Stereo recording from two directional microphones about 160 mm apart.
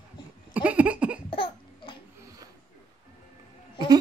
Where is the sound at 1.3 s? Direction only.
35° left (ahead or behind).